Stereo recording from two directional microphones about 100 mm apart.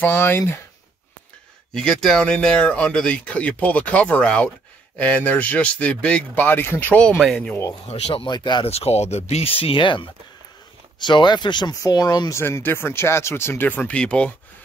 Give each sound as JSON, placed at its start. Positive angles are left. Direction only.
{"t": 0.0, "sound": "speech", "side_deg": 20}
{"t": 1.7, "sound": "speech", "side_deg": 5}
{"t": 7.0, "sound": "speech", "side_deg": 5}
{"t": 7.9, "sound": "speech", "side_deg": 65}
{"t": 8.3, "sound": "speech", "side_deg": 50}
{"t": 8.6, "sound": "speech", "side_deg": 90}
{"t": 12.4, "sound": "speech", "side_deg": 25}